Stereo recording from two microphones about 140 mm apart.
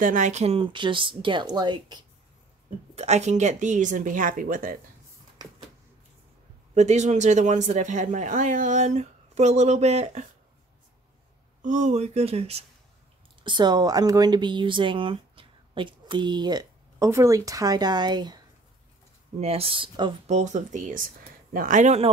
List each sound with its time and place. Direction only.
0.0 s speech: 65° right (ahead or behind); by 2.0 s 30° right (ahead or behind)
3.0 s speech: 50° right (ahead or behind); by 4.7 s 80° right
6.7 s speech: 55° right (ahead or behind)
11.6 s speech: 60° right (ahead or behind)
13.4 s speech: 35° right (ahead or behind)
19.4 s speech: 45° right (ahead or behind)
20.2 s speech: 55° right (ahead or behind)